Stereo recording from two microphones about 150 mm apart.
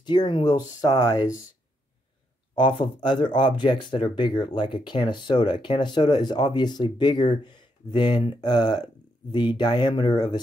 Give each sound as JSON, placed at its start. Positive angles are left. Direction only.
{"t": 0.0, "sound": "speech", "side_deg": 30}
{"t": 2.5, "sound": "speech", "side_deg": 30}